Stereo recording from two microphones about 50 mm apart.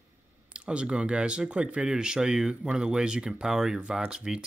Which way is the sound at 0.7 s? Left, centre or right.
Right.